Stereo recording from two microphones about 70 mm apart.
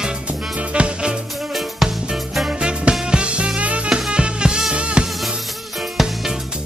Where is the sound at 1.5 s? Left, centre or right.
Centre.